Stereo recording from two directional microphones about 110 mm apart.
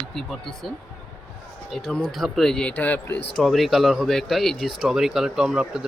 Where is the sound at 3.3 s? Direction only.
Centre (ahead or behind).